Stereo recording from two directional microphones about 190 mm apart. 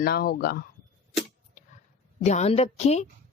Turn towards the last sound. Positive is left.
turn(degrees=35)  # may be behind; listen again after turning